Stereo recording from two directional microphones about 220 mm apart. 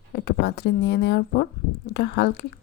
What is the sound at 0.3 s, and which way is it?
Speech, 50° left (ahead or behind).